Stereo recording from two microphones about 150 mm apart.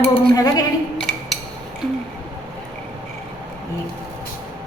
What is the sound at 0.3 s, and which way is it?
Speech, 25° left (ahead or behind).